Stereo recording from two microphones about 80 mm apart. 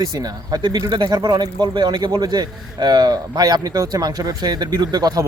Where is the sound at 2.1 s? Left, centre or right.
Right.